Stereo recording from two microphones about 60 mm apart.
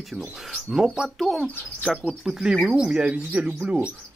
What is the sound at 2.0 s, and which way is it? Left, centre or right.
Speech, centre.